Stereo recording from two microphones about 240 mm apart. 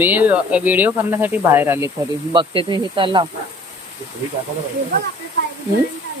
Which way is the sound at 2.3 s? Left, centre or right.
Right.